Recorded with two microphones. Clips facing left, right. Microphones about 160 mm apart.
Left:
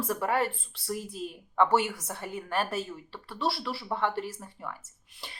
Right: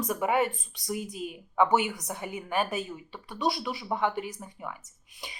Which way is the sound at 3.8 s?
5° right (ahead or behind).